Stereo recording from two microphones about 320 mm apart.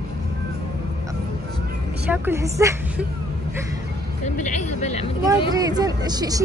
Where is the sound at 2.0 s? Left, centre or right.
Centre.